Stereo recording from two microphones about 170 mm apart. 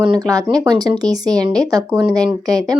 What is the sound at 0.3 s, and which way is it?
Speech, 20° right (ahead or behind).